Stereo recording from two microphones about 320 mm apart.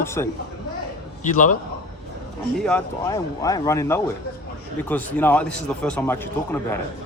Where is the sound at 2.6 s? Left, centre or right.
Centre.